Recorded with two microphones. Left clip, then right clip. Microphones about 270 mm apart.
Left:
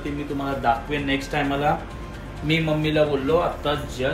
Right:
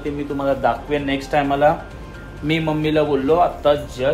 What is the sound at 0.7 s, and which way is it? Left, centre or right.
Speech, centre.